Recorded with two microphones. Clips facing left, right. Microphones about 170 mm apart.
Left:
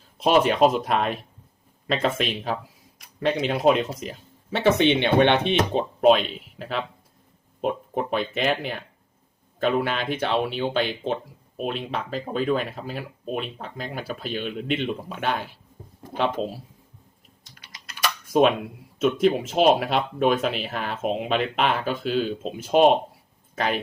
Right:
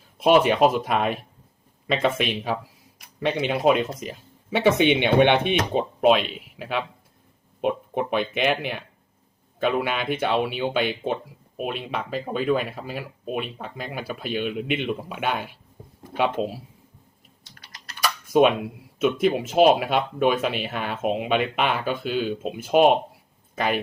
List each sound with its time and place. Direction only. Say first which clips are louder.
0.6 s speech: even; 5° right (ahead or behind)
18.0 s speech: right 1 dB; centre (ahead or behind)